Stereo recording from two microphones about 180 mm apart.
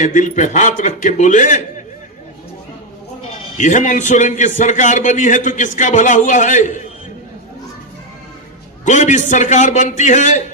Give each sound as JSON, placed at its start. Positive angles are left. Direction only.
{"t": 0.0, "sound": "a man's voice", "side_deg": 45}
{"t": 3.6, "sound": "a man's voice", "side_deg": 45}
{"t": 8.8, "sound": "a man's voice", "side_deg": 40}